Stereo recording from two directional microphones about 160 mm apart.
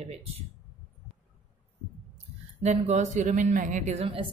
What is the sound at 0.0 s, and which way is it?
Speech, 40° right (ahead or behind).